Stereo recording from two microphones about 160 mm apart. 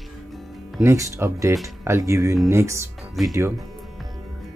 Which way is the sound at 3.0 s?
Centre (ahead or behind).